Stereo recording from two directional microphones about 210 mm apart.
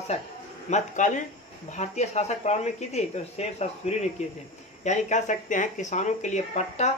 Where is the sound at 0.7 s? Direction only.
35° left (ahead or behind).